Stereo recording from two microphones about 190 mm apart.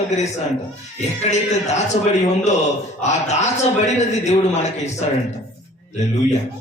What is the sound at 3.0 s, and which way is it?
A man's voice, 35° left (ahead or behind).